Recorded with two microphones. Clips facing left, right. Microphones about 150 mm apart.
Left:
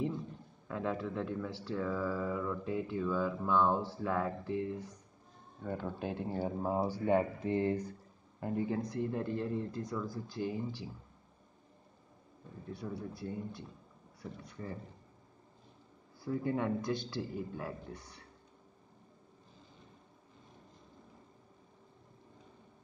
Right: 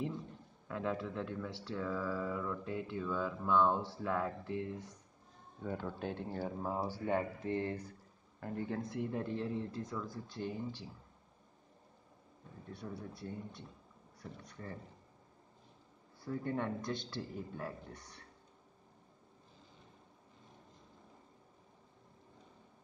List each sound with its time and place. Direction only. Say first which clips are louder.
0.7 s speech: left 2 dB; centre (ahead or behind)
5.9 s speech: left 3 dB; 10° left (ahead or behind)
8.6 s speech: left 4 dB; centre (ahead or behind)
12.7 s speech: left 4 dB; 5° left (ahead or behind)
16.2 s speech: left 4 dB; 5° left (ahead or behind)